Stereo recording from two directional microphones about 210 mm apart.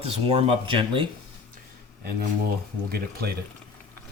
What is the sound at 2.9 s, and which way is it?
Speech, 45° right (ahead or behind).